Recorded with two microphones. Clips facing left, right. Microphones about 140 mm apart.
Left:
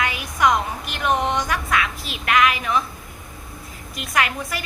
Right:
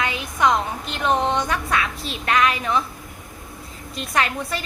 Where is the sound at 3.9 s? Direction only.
30° right (ahead or behind).